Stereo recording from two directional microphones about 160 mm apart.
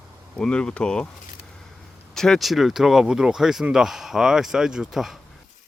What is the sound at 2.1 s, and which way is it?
Speech, 5° left (ahead or behind).